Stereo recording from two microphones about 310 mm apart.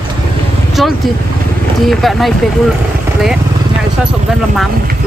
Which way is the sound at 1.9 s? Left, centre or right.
Centre.